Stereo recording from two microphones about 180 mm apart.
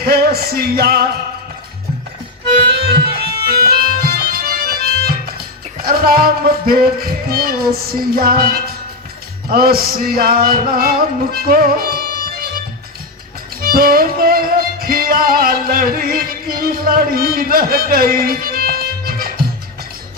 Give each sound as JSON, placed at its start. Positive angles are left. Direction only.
{"t": 0.0, "sound": "music", "side_deg": -60}
{"t": 2.6, "sound": "music", "side_deg": -65}
{"t": 4.0, "sound": "music", "side_deg": -55}
{"t": 13.6, "sound": "music", "side_deg": -55}